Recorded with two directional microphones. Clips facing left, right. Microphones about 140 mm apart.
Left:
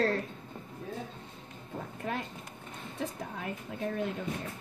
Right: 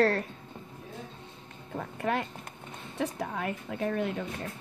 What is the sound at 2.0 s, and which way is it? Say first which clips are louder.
A woman's voice: right 7 dB; 70° right (ahead or behind).